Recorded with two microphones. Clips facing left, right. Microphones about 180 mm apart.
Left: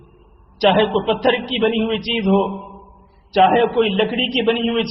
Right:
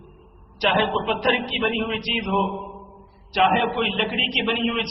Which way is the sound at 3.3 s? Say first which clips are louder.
Left 7 dB; 35° left (ahead or behind).